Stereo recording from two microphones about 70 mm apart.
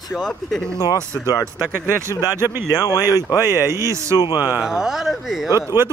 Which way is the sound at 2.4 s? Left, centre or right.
Right.